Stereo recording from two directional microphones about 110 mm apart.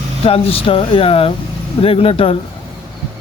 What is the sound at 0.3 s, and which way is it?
Speech, 60° left (ahead or behind).